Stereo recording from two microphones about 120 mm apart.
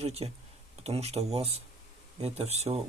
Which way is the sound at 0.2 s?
50° right (ahead or behind).